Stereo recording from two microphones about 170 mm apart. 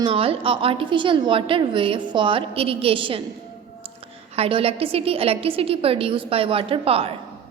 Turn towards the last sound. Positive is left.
turn(degrees=-35)  # may be behind; listen again after turning